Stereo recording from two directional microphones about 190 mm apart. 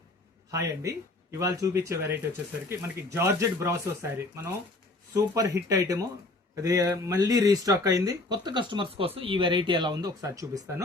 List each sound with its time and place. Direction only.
0.5 s speech: 15° right (ahead or behind)
5.1 s speech: 15° right (ahead or behind)